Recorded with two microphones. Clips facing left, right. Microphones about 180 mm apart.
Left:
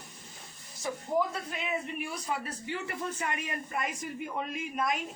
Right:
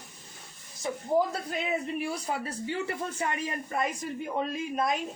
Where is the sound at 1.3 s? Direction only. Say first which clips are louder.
Right 4 dB; 35° right (ahead or behind).